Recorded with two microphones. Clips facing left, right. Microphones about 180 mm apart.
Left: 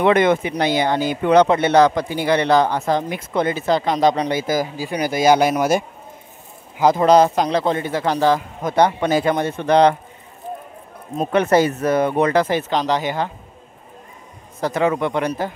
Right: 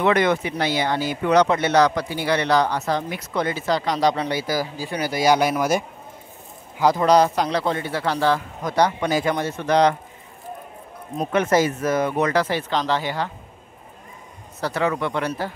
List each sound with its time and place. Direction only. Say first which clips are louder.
0.0 s speech: left 4 dB; 25° left (ahead or behind)
6.8 s speech: left 3 dB; 25° left (ahead or behind)
11.1 s speech: left 3 dB; 30° left (ahead or behind)
14.7 s speech: left 4 dB; 20° left (ahead or behind)